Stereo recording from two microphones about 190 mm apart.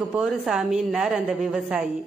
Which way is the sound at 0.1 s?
5° right (ahead or behind).